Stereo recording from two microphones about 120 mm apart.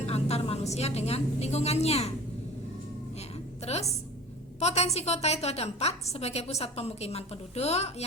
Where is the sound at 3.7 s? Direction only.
60° left (ahead or behind).